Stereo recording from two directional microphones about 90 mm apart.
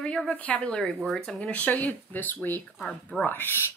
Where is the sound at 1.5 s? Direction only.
15° left (ahead or behind).